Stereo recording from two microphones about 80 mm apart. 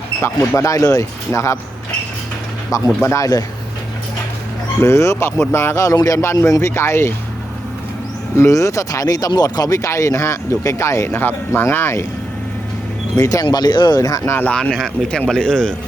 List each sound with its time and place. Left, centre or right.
0.2 s speech: left
3.0 s speech: left
4.8 s speech: left
8.4 s speech: left
13.1 s speech: left
14.0 s speech: left
14.5 s speech: centre